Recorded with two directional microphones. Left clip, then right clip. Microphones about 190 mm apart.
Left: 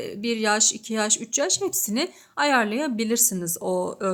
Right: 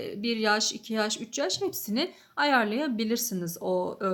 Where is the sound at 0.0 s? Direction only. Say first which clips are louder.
Left 3 dB; 25° left (ahead or behind).